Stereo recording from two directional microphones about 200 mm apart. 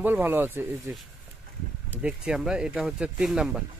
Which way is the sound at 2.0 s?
5° right (ahead or behind).